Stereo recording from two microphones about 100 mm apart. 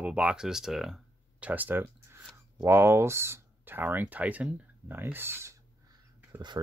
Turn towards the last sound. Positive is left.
turn(degrees=-25)  # may be behind; listen again after turning